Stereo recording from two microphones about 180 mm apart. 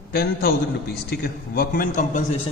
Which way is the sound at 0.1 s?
60° left (ahead or behind).